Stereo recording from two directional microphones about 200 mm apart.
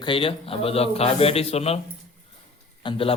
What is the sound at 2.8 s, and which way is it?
Speech, 25° left (ahead or behind).